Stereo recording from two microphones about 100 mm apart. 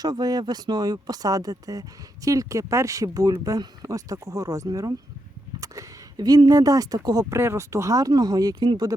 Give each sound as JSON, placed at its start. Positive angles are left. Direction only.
{"t": 0.0, "sound": "speech", "side_deg": -40}